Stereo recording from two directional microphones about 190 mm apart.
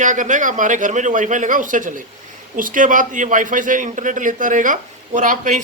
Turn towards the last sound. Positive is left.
turn(degrees=-40)  # may be behind; listen again after turning